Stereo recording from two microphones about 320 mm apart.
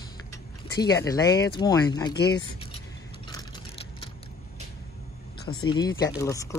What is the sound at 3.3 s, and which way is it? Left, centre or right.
Vehicle, centre.